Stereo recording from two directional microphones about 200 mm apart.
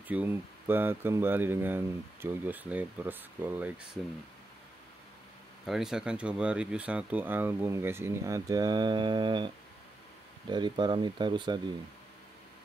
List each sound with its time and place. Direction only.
0.1 s speech: 10° right (ahead or behind)
5.7 s speech: centre (ahead or behind); by 9.5 s 25° right (ahead or behind)
10.5 s speech: 20° right (ahead or behind)